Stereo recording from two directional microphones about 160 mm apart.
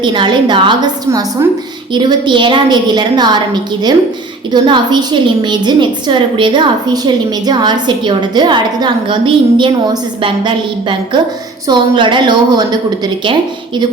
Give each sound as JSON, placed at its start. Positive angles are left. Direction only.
{"t": 0.0, "sound": "a woman's voice", "side_deg": -30}